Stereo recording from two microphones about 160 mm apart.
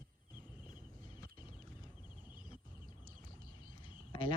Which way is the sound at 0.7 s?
55° right (ahead or behind).